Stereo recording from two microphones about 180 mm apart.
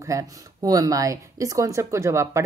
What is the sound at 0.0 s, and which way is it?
Speech, 20° right (ahead or behind).